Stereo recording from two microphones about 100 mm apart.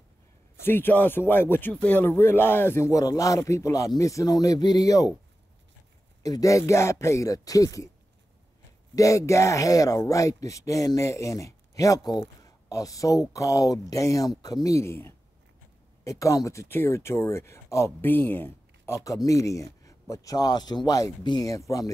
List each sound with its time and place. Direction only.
0.7 s speech: 20° left (ahead or behind)
6.2 s speech: 35° left (ahead or behind)
8.9 s speech: 30° left (ahead or behind)
19.0 s speech: 35° left (ahead or behind)